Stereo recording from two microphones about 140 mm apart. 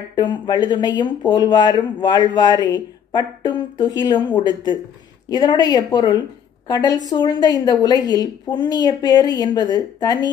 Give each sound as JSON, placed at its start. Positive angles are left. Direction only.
{"t": 0.1, "sound": "a woman's voice", "side_deg": 30}